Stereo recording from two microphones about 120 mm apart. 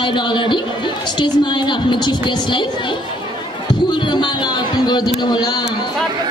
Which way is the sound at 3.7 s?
40° left (ahead or behind).